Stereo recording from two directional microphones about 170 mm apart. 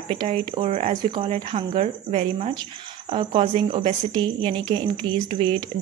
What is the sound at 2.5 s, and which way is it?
A woman's voice, 30° right (ahead or behind).